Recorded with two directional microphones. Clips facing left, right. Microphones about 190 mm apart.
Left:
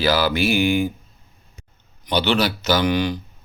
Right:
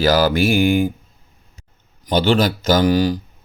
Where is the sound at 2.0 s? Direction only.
45° right (ahead or behind).